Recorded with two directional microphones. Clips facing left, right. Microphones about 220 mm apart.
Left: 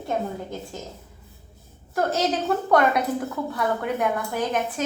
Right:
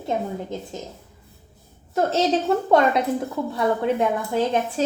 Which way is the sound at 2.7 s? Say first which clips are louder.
Right 1 dB; 25° right (ahead or behind).